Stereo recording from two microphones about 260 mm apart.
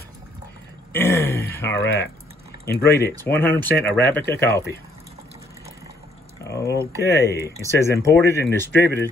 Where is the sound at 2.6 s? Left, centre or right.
Left.